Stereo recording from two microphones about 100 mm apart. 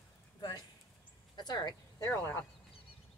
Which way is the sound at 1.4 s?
45° left (ahead or behind).